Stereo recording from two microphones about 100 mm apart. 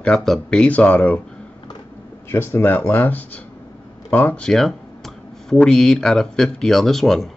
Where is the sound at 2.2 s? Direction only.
25° left (ahead or behind).